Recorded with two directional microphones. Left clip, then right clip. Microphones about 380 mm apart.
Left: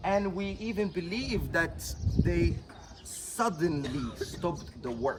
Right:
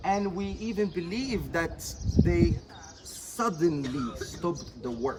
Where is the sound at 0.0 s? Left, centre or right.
Centre.